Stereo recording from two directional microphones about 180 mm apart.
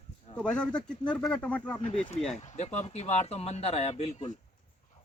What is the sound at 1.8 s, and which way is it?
A man's voice, 35° left (ahead or behind).